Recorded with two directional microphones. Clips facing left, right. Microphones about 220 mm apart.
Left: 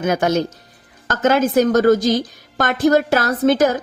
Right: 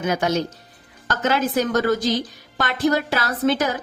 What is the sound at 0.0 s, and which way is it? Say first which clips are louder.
A woman's voice: left 4 dB; 50° left (ahead or behind).